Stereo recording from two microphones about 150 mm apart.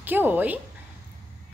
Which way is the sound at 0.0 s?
15° right (ahead or behind).